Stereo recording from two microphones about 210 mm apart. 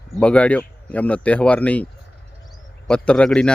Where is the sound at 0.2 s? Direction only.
5° left (ahead or behind).